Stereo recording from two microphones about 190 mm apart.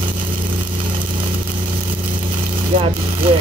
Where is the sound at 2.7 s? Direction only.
30° right (ahead or behind).